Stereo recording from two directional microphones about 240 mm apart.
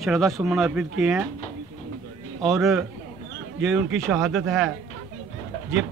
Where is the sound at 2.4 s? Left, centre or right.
Centre.